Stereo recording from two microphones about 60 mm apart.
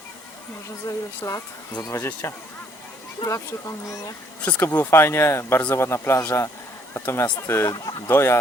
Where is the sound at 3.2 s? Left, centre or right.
Left.